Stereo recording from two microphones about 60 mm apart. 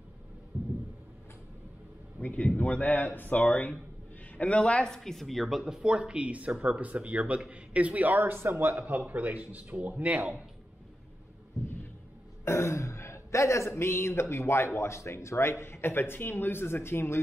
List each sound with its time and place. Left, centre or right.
2.1 s speech: left; by 8.7 s right
8.8 s speech: right
12.4 s throat clearing: left
14.3 s speech: left